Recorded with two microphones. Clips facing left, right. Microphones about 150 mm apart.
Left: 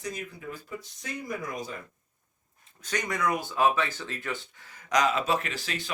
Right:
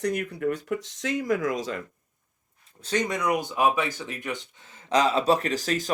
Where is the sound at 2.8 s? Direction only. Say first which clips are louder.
Right 4 dB; 25° right (ahead or behind).